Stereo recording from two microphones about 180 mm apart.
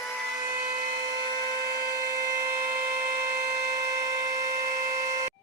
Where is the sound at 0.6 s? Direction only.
20° right (ahead or behind).